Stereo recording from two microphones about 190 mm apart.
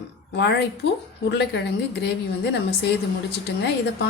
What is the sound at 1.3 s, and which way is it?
A woman's voice, 65° left (ahead or behind).